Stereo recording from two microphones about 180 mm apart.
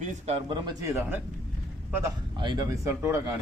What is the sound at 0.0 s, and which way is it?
A man's voice, 40° right (ahead or behind).